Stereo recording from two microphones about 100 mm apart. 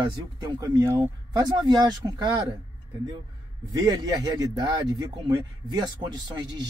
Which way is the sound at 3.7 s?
40° right (ahead or behind).